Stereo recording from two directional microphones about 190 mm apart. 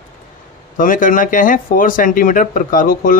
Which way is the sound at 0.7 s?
45° left (ahead or behind).